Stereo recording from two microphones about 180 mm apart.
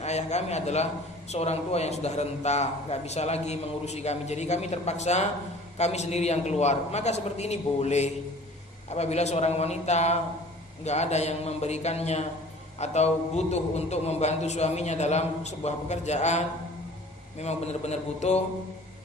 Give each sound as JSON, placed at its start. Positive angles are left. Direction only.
{"t": 0.0, "sound": "a man's voice", "side_deg": 40}